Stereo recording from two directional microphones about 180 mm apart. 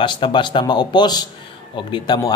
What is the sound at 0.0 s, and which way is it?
A man's voice, 25° left (ahead or behind).